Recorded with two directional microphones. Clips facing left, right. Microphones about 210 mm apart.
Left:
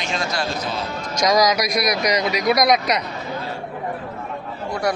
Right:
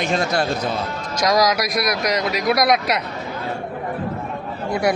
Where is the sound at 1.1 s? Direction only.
Centre (ahead or behind).